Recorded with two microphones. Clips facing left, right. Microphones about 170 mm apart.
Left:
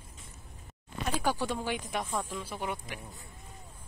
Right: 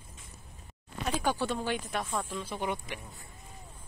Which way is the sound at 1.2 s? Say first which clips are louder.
Right 1 dB; 10° left (ahead or behind).